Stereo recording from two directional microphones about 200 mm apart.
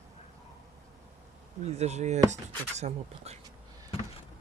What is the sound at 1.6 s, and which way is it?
Speech, 35° right (ahead or behind).